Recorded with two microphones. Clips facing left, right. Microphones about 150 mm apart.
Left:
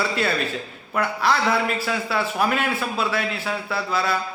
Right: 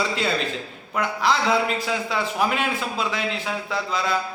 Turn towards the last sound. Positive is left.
turn(degrees=-15)  # may be behind; listen again after turning